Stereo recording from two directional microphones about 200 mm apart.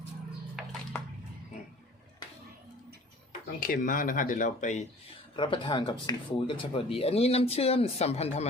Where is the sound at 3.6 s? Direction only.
45° left (ahead or behind).